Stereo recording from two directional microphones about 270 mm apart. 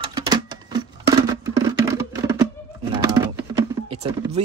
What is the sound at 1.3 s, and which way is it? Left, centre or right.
Music, centre.